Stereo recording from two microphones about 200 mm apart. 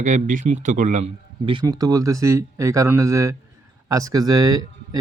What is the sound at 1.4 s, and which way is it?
Speech, 20° right (ahead or behind).